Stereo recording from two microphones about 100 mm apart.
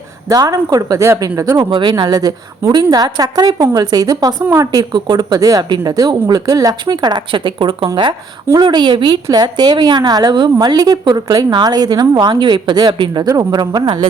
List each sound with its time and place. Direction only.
0.3 s a woman's voice: 40° right (ahead or behind)
1.7 s a woman's voice: 50° right (ahead or behind)
8.5 s a woman's voice: 45° right (ahead or behind)
13.8 s speech: 75° right (ahead or behind)